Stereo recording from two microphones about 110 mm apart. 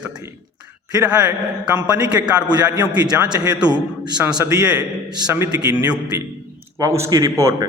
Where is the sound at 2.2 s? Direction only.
25° right (ahead or behind).